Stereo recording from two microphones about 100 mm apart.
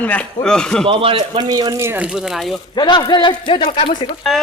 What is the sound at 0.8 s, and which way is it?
Speech, 65° right (ahead or behind).